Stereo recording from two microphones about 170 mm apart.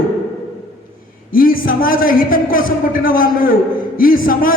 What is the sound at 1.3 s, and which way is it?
A man's voice, 55° left (ahead or behind).